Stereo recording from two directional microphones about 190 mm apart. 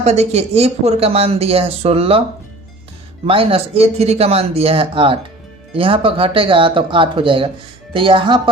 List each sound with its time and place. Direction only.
0.0 s speech: 35° right (ahead or behind)
3.2 s speech: 30° right (ahead or behind)